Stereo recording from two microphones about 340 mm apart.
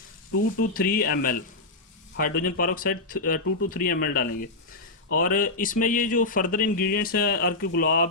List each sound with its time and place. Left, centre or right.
0.7 s speech: left